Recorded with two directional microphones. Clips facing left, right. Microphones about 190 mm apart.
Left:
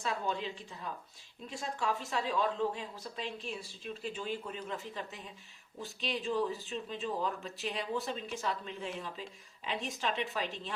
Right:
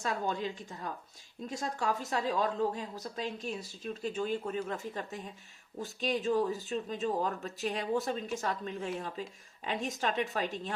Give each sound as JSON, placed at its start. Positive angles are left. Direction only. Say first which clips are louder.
{"t": 0.0, "sound": "speech", "louder": "right 2 dB", "side_deg": -45}